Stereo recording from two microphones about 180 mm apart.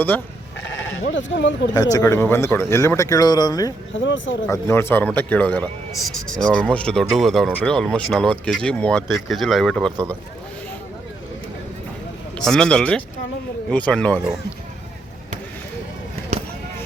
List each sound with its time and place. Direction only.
1.1 s speech: 85° left
1.7 s speech: 20° left (ahead or behind)
3.9 s speech: 90° left
4.4 s speech: 15° left (ahead or behind)
12.5 s speech: 5° left (ahead or behind)